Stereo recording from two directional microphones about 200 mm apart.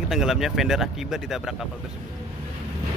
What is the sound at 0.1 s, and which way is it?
Speech, centre (ahead or behind).